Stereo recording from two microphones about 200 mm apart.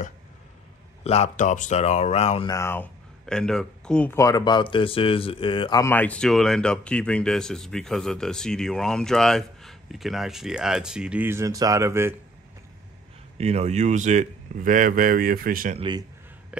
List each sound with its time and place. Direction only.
1.0 s speech: 35° left (ahead or behind)
2.5 s speech: 10° left (ahead or behind); by 12.2 s 10° right (ahead or behind)
13.4 s speech: 30° right (ahead or behind)
15.8 s a man's voice: 20° right (ahead or behind)